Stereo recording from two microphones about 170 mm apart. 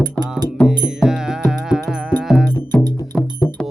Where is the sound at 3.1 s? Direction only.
15° left (ahead or behind).